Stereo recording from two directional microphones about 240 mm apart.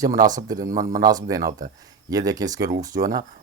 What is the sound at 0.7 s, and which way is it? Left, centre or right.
Speech, right.